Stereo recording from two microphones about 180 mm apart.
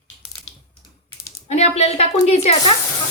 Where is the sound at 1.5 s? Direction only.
35° left (ahead or behind).